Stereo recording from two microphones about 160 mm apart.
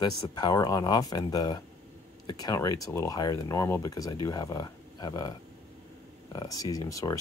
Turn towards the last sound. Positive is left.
turn(degrees=20)  # may be behind; listen again after turning